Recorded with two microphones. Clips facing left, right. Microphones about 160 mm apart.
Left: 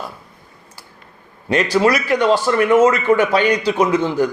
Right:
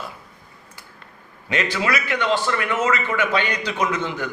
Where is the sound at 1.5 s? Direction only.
40° left (ahead or behind).